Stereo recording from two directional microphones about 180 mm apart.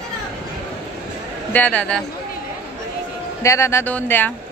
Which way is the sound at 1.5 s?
10° left (ahead or behind).